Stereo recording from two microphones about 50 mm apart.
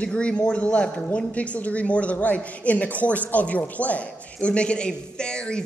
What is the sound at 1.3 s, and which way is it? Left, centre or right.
A woman's voice, left.